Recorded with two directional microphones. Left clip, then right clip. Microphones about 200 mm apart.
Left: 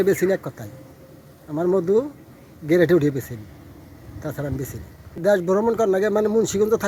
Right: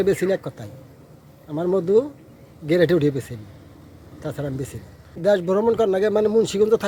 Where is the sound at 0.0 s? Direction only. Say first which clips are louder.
Left 1 dB; centre (ahead or behind).